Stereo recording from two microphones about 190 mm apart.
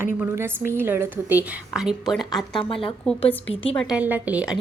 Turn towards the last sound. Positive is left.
turn(degrees=-5)  # may be behind; listen again after turning